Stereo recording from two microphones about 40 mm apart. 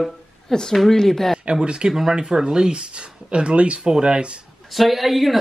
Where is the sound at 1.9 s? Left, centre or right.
Centre.